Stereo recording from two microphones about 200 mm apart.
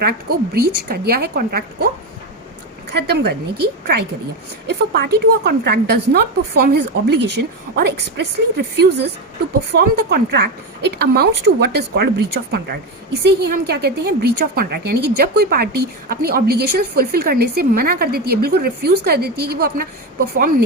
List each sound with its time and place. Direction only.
0.0 s a woman's voice: 50° right (ahead or behind)
3.1 s a woman's voice: 55° right (ahead or behind)
4.9 s a woman's voice: 55° right (ahead or behind)